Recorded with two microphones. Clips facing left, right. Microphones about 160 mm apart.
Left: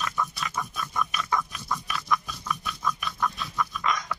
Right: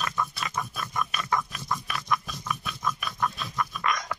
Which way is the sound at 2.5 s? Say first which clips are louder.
Left 1 dB; 10° right (ahead or behind).